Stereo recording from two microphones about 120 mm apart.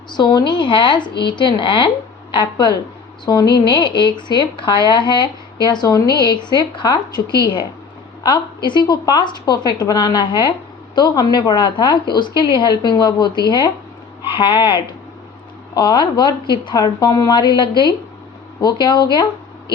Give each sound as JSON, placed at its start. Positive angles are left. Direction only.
{"t": 0.1, "sound": "speech", "side_deg": 40}